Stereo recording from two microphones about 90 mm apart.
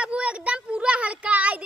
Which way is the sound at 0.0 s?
10° right (ahead or behind).